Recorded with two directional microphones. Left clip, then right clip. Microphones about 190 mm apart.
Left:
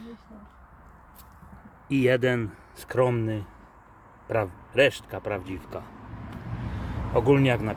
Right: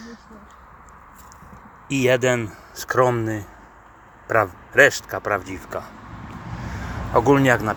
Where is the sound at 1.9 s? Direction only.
5° left (ahead or behind).